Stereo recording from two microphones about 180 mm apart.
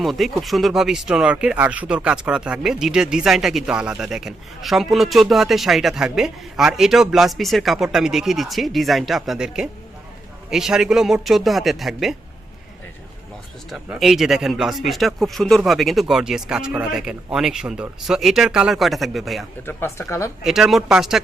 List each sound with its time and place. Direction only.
0.0 s speech: centre (ahead or behind)
13.7 s speech: centre (ahead or behind)
19.6 s speech: 15° left (ahead or behind)
20.4 s speech: centre (ahead or behind)